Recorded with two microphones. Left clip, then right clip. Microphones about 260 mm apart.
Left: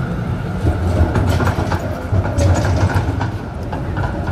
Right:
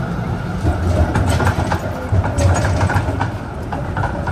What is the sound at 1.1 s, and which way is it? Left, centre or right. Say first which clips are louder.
Vehicle: right 1 dB; right.